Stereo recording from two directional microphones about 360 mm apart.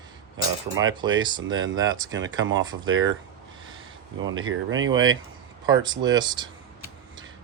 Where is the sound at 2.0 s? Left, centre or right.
Right.